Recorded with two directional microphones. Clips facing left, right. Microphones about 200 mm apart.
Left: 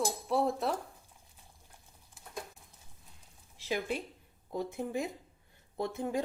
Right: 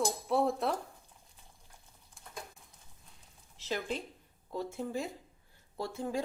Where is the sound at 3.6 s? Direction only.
10° left (ahead or behind).